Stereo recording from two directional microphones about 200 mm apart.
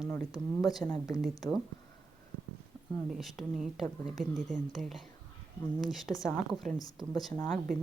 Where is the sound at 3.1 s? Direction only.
Centre (ahead or behind).